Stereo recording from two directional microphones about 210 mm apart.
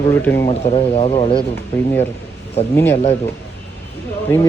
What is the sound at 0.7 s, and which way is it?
Speech, 25° left (ahead or behind).